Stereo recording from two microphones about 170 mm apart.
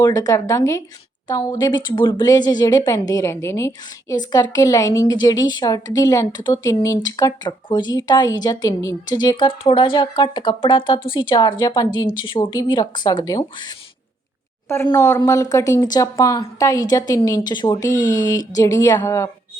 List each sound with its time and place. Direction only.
0.0 s a woman's voice: 20° left (ahead or behind)
14.9 s a woman's voice: 20° left (ahead or behind)